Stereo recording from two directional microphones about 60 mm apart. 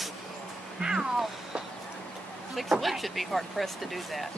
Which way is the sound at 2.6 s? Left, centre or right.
Centre.